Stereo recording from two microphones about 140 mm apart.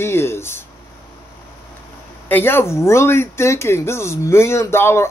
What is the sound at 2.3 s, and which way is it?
Speech, 15° left (ahead or behind).